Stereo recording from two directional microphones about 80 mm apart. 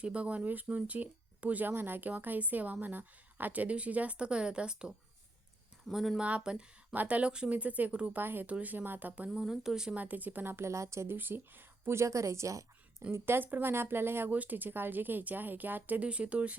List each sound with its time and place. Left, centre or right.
0.0 s a woman's voice: centre
6.2 s a woman's voice: centre
8.2 s speech: right
9.3 s a woman's voice: centre
10.0 s speech: right
13.1 s speech: right